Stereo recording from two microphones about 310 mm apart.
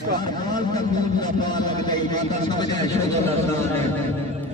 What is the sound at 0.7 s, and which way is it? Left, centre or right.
A man's voice, centre.